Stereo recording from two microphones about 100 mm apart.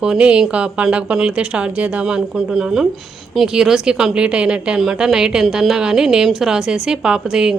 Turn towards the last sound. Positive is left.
turn(degrees=-5)  # may be behind; listen again after turning